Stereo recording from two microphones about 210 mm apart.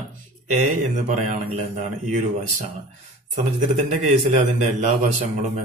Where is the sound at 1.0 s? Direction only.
35° right (ahead or behind).